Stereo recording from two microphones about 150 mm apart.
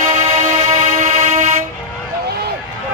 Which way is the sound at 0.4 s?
55° right (ahead or behind).